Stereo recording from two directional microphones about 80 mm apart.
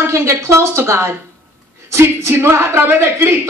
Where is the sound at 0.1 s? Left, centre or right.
Right.